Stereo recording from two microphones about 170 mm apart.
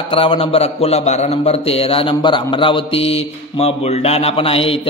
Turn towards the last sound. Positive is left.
turn(degrees=35)  # may be behind; listen again after turning